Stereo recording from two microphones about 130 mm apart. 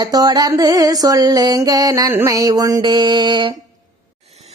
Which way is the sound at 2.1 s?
25° right (ahead or behind).